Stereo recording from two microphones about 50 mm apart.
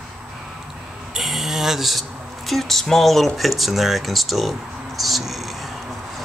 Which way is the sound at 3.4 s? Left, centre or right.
Centre.